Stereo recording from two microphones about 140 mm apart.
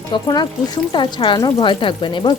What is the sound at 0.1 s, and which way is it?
Speech, 30° left (ahead or behind).